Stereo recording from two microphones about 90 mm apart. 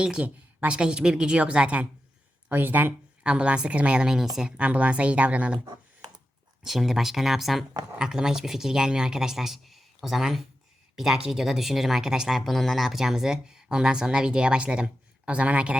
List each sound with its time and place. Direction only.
0.0 s speech: 10° right (ahead or behind)
6.7 s speech: 5° right (ahead or behind)